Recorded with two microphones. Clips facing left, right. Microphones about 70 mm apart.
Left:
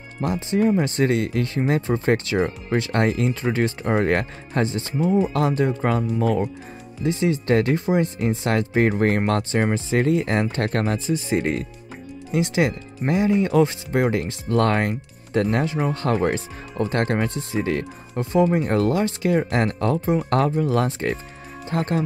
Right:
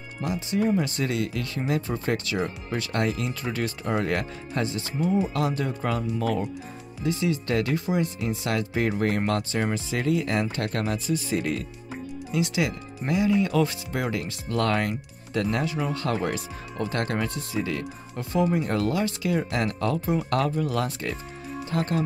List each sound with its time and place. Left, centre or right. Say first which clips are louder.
0.2 s speech: left 5 dB; left